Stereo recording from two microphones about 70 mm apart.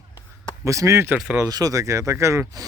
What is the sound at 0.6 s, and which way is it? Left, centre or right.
Speech, right.